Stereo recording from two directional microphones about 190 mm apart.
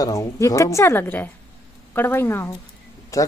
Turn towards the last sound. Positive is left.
turn(degrees=15)  # may be behind; listen again after turning